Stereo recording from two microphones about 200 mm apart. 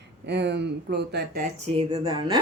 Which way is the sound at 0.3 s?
60° right (ahead or behind).